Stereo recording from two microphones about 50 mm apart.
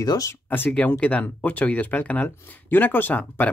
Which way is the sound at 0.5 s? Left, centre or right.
Left.